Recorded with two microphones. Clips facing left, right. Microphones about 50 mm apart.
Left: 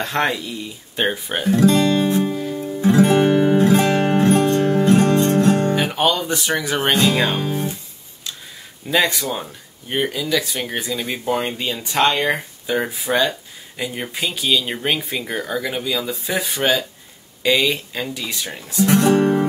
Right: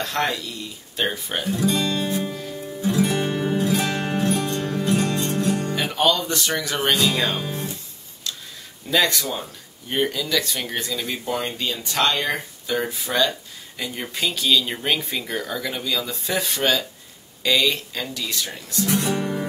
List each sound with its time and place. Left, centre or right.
0.0 s speech: left
1.5 s speech: left
2.0 s music: left
5.8 s music: centre
7.3 s speech: left
8.8 s speech: centre
18.9 s music: left